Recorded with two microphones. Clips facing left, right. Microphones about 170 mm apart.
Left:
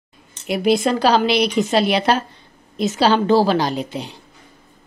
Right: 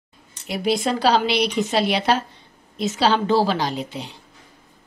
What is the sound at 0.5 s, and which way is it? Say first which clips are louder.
Speech: left 5 dB; 65° left (ahead or behind).